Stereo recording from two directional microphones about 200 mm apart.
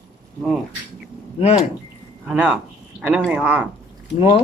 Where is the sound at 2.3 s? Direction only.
5° right (ahead or behind).